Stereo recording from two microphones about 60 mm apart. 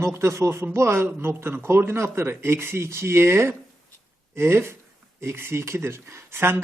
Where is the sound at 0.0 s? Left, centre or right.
Right.